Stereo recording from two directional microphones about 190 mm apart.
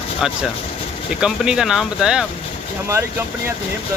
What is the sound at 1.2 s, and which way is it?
Speech, 5° right (ahead or behind).